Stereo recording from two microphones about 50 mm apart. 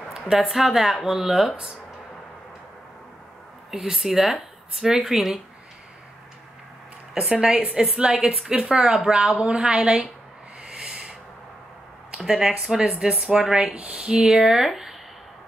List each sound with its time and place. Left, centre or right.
0.1 s a woman's voice: centre
3.7 s speech: centre
7.2 s a woman's voice: centre
10.6 s a sound: centre
12.2 s speech: centre